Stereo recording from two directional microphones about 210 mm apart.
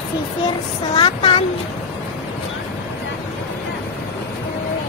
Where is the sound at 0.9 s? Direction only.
25° left (ahead or behind).